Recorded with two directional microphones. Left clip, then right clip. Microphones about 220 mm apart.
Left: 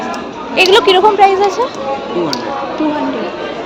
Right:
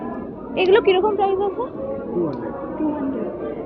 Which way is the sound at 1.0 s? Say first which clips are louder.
Left 11 dB; 25° left (ahead or behind).